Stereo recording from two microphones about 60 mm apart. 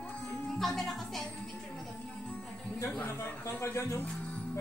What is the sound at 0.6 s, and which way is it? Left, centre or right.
Music, centre.